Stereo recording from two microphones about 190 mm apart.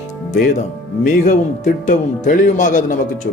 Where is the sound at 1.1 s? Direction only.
45° left (ahead or behind).